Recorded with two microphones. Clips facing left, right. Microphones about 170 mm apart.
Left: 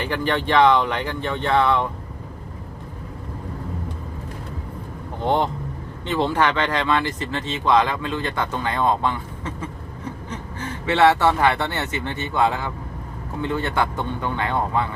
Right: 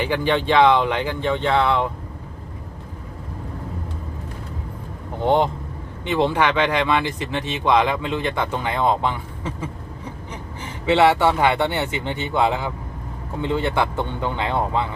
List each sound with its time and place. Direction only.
0.0 s speech: 15° right (ahead or behind)
6.1 s speech: 15° right (ahead or behind)